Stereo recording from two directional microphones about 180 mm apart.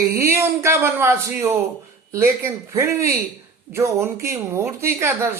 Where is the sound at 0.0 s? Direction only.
15° right (ahead or behind).